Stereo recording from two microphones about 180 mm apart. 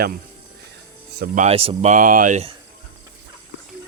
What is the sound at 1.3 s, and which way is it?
Speech, 35° right (ahead or behind).